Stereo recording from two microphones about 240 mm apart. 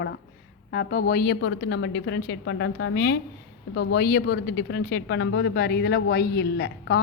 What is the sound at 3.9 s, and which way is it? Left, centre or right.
Speech, left.